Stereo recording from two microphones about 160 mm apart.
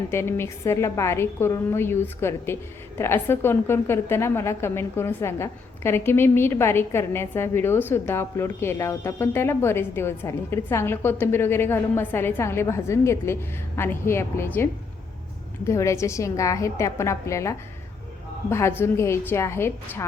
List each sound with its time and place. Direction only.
0.1 s a woman's voice: 15° left (ahead or behind)